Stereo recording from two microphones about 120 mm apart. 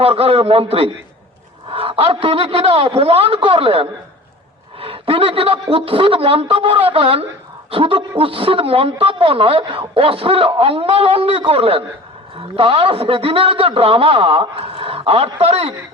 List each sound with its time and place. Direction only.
0.0 s a man's voice: 55° right (ahead or behind)